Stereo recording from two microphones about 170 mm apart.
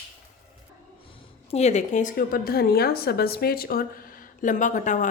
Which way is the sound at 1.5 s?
40° left (ahead or behind).